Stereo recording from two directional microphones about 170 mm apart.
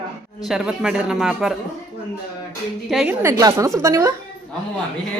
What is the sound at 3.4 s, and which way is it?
Speech, 20° right (ahead or behind).